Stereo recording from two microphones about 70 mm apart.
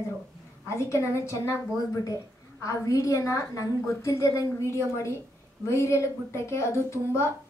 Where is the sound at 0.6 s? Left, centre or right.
Left.